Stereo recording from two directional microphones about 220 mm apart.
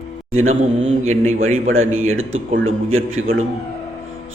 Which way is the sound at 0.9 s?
30° right (ahead or behind).